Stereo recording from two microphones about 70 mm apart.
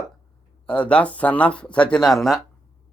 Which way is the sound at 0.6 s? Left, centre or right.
Centre.